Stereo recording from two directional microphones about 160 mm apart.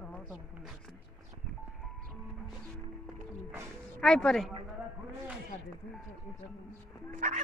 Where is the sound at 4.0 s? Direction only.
5° left (ahead or behind).